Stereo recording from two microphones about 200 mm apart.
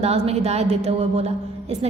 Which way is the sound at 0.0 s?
30° right (ahead or behind).